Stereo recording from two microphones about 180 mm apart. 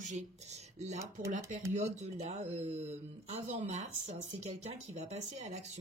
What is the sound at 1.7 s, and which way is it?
Speech, 40° right (ahead or behind).